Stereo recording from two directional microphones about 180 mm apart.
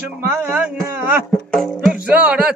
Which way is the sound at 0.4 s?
5° right (ahead or behind).